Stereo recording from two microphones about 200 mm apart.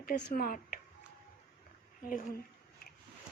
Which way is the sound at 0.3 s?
45° left (ahead or behind).